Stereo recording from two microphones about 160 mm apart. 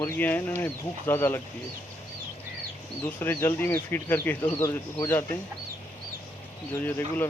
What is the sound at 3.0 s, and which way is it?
Speech, 15° left (ahead or behind).